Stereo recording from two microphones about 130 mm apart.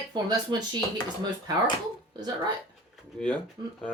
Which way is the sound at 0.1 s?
35° right (ahead or behind).